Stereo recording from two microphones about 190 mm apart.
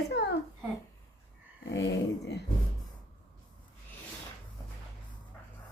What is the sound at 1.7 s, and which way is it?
Speech, 65° left (ahead or behind).